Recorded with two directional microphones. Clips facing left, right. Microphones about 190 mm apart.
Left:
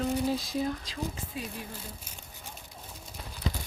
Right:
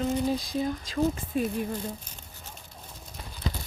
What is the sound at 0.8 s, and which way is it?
Speech, 50° right (ahead or behind).